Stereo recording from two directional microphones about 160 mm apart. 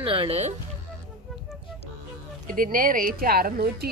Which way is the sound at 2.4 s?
60° right (ahead or behind).